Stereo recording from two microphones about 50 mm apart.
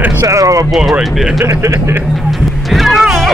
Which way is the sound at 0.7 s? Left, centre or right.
Centre.